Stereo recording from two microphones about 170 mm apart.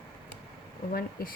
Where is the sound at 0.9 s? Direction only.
60° left (ahead or behind).